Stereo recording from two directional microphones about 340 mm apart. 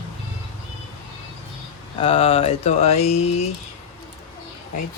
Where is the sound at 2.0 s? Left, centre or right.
Centre.